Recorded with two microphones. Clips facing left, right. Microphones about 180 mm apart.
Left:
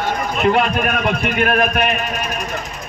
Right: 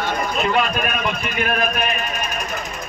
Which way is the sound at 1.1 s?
60° left (ahead or behind).